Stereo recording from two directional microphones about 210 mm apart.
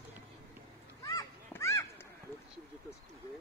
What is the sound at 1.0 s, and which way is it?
Children playing, 15° left (ahead or behind).